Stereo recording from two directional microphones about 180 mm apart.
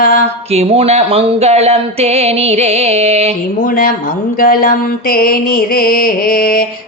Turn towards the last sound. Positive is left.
turn(degrees=50)  # may be behind; listen again after turning